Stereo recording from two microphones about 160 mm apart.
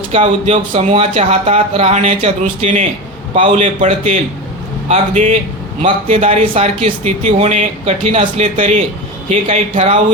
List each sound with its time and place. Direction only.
0.1 s speech: 40° right (ahead or behind)